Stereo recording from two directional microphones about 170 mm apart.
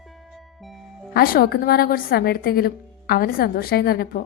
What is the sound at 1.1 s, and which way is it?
A woman's voice, 60° left (ahead or behind).